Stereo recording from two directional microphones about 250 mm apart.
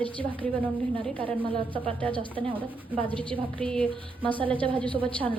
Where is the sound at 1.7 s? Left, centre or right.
Right.